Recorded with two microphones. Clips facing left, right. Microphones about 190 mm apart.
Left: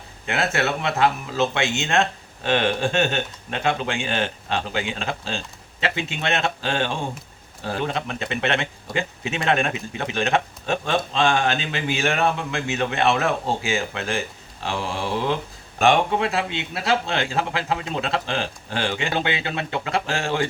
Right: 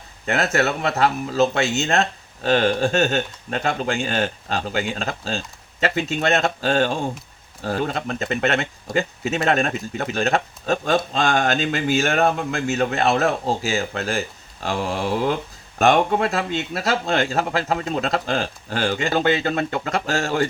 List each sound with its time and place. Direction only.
0.3 s speech: 40° right (ahead or behind)